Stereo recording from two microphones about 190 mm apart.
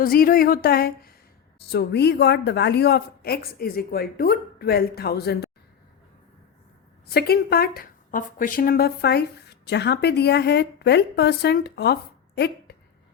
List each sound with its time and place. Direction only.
0.0 s speech: 50° left (ahead or behind)
7.1 s speech: 55° left (ahead or behind)